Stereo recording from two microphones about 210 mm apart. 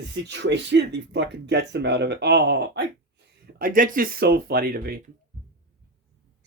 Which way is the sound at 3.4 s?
40° right (ahead or behind).